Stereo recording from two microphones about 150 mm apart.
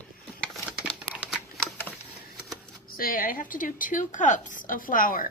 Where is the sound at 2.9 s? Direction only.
75° left (ahead or behind).